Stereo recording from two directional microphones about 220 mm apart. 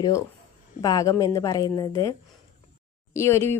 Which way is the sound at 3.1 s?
10° left (ahead or behind).